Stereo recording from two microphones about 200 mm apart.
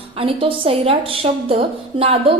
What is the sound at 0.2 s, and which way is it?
A woman's voice, 25° right (ahead or behind).